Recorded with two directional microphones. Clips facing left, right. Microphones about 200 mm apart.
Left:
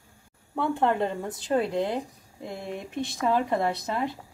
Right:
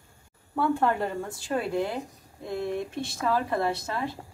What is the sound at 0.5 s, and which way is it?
A woman's voice, 20° left (ahead or behind).